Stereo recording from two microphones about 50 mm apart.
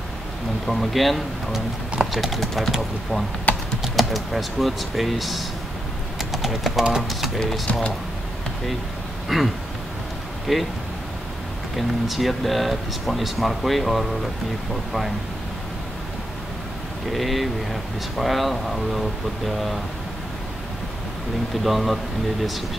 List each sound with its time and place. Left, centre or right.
0.7 s speech: centre
3.5 s typing: left
3.8 s speech: centre
7.3 s speech: centre
9.3 s speech: centre
11.7 s speech: centre
17.1 s speech: centre
21.6 s speech: centre